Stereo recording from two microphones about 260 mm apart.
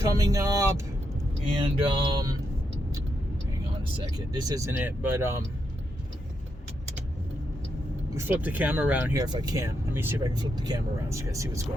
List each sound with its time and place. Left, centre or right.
0.2 s speech: centre
4.3 s speech: centre
8.3 s speech: centre